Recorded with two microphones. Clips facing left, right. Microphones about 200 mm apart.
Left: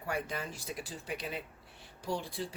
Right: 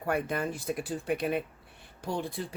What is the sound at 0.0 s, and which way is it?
Speech, 55° right (ahead or behind).